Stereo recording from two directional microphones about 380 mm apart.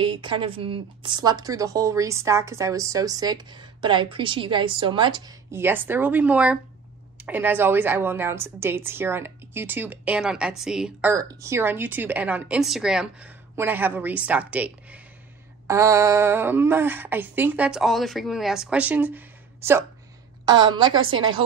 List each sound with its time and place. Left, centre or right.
0.0 s a woman's voice: centre
21.0 s a woman's voice: right